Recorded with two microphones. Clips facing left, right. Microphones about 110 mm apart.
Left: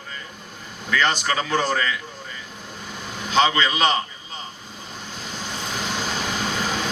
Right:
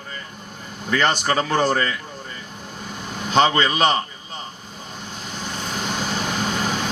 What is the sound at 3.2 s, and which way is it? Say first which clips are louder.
Speech: right 2 dB; 50° right (ahead or behind).